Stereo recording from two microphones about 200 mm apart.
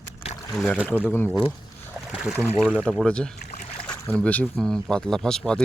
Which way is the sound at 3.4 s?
35° left (ahead or behind).